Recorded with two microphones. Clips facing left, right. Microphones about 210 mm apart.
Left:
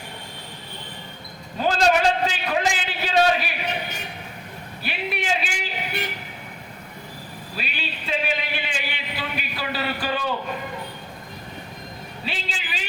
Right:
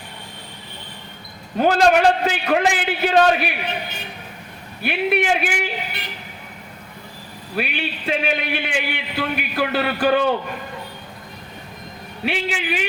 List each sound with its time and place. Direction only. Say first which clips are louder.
1.5 s a man's voice: right 5 dB; 60° right (ahead or behind)
4.8 s a man's voice: right 9 dB; 60° right (ahead or behind)
7.5 s a man's voice: right 9 dB; 60° right (ahead or behind)
12.2 s a man's voice: right 10 dB; 65° right (ahead or behind)